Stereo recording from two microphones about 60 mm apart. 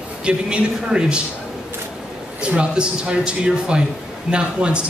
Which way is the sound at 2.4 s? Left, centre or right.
Centre.